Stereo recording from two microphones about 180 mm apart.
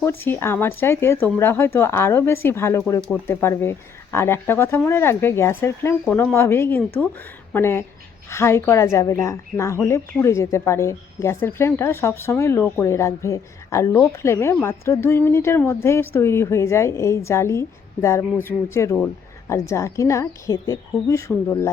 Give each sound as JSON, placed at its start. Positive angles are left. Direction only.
{"t": 0.0, "sound": "speech", "side_deg": 10}